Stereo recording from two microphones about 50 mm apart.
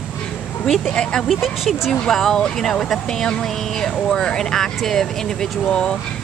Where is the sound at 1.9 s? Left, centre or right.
Centre.